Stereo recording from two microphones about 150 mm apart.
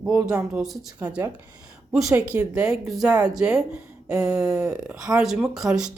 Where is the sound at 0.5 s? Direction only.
Centre (ahead or behind).